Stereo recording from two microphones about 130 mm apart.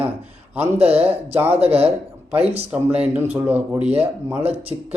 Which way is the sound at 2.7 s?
10° right (ahead or behind).